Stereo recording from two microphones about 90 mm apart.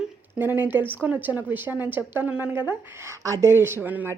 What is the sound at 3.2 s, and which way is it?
Speech, 35° right (ahead or behind).